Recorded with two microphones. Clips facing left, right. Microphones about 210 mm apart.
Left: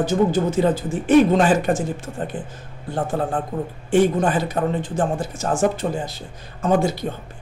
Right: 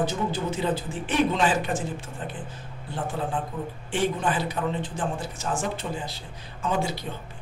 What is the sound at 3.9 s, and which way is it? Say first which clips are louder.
A man's voice: left 9 dB; 45° left (ahead or behind).